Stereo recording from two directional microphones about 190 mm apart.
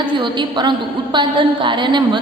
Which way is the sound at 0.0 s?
25° right (ahead or behind).